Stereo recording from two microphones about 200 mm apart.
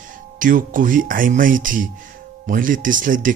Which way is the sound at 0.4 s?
40° right (ahead or behind).